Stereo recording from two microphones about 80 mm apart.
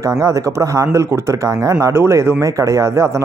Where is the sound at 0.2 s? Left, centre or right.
Right.